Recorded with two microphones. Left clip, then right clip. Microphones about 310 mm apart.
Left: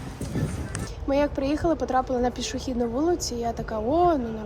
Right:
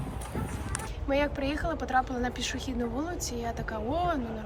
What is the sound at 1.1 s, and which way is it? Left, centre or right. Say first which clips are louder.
A woman's voice: left 5 dB; centre.